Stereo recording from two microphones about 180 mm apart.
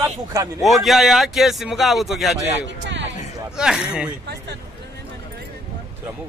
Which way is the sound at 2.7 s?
85° right.